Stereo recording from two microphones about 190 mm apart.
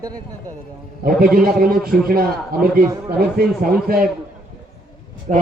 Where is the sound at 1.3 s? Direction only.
50° right (ahead or behind).